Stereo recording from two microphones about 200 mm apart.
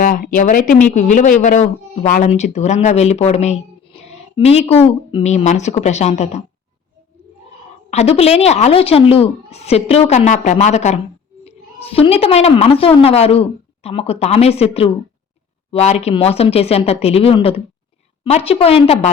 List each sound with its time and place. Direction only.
0.0 s speech: 45° left (ahead or behind)
7.9 s a woman's voice: 30° left (ahead or behind)